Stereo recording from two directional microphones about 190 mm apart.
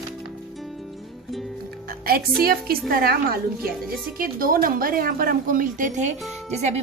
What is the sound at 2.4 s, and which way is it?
A woman's voice, 50° right (ahead or behind).